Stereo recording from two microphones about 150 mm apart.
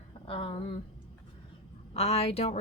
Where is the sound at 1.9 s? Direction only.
45° left (ahead or behind).